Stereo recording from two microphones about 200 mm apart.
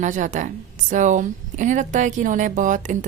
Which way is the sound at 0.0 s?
40° right (ahead or behind).